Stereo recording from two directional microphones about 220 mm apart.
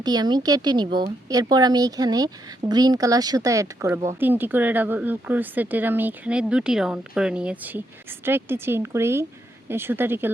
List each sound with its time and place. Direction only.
0.0 s a woman's voice: 20° right (ahead or behind)